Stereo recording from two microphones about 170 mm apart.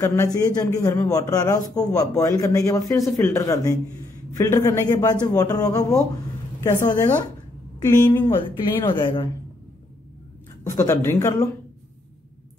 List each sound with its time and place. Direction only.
0.0 s a woman's voice: 15° left (ahead or behind)
8.5 s a man's voice: 30° left (ahead or behind)
10.6 s a man's voice: 15° left (ahead or behind)